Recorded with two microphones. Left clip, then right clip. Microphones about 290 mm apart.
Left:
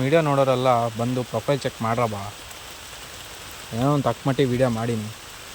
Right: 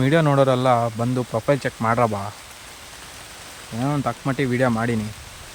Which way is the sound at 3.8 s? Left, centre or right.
Centre.